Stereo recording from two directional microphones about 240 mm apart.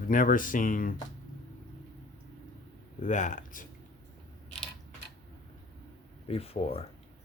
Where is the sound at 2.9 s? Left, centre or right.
Left.